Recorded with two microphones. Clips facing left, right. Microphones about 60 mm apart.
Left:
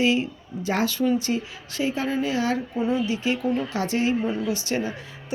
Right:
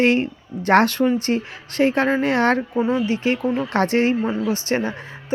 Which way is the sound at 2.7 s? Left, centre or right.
Right.